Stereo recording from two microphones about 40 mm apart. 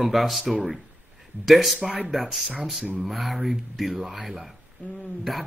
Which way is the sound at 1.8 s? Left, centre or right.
Right.